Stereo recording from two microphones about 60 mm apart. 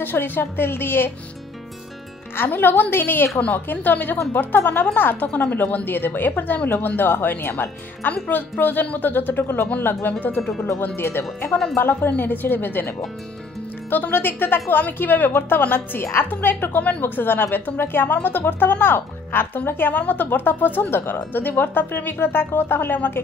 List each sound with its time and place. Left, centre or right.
0.0 s speech: left
2.3 s speech: left
5.3 s speech: centre
5.6 s speech: left
11.0 s speech: left